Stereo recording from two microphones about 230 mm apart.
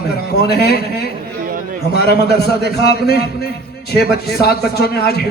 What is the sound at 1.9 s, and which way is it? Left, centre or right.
Speech, left.